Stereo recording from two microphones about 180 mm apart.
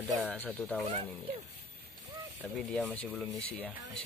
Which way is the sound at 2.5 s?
10° left (ahead or behind).